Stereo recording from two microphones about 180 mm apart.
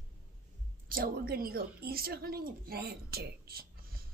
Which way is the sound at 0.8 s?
55° right (ahead or behind).